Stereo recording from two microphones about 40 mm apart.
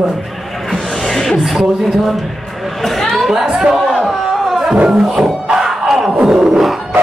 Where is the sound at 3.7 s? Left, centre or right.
Centre.